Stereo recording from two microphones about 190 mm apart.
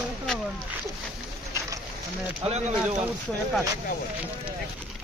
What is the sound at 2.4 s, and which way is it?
Speech, 30° right (ahead or behind).